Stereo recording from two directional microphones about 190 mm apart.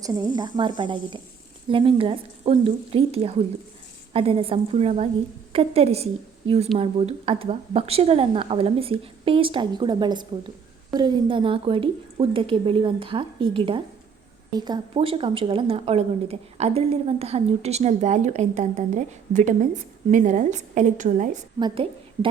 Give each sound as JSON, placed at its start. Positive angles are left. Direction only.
{"t": 0.3, "sound": "a woman's voice", "side_deg": -20}
{"t": 21.6, "sound": "a woman's voice", "side_deg": -25}